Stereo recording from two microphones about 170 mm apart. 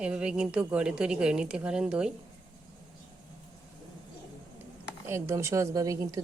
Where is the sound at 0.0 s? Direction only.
5° right (ahead or behind).